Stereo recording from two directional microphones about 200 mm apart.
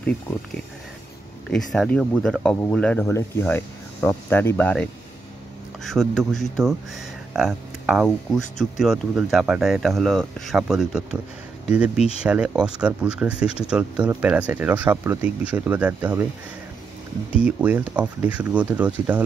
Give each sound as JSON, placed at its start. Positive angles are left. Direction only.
{"t": 1.5, "sound": "speech", "side_deg": 0}
{"t": 5.9, "sound": "speech", "side_deg": 0}
{"t": 17.3, "sound": "speech", "side_deg": -5}